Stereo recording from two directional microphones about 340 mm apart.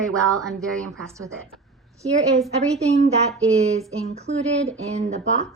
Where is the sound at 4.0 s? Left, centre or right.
Centre.